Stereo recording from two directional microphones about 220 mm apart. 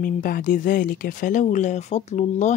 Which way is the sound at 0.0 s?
40° left (ahead or behind).